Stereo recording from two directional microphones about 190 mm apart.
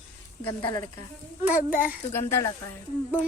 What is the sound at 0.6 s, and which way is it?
Speech, 20° left (ahead or behind).